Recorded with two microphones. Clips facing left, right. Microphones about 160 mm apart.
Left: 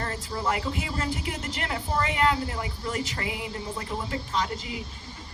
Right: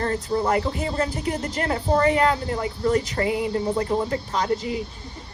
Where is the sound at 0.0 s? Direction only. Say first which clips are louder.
Right 7 dB; 35° right (ahead or behind).